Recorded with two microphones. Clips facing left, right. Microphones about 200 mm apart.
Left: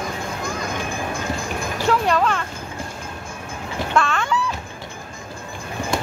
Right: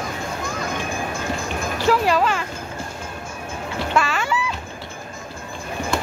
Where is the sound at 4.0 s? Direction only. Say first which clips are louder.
Left 1 dB; 5° right (ahead or behind).